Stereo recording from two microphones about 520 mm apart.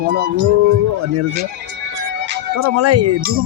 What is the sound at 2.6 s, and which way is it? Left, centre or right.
Speech, right.